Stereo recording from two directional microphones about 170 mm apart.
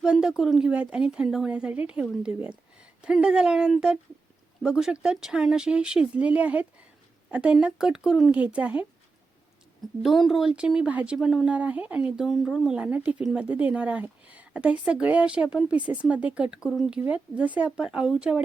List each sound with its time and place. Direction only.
0.0 s a woman's voice: 5° right (ahead or behind)
10.0 s a woman's voice: centre (ahead or behind)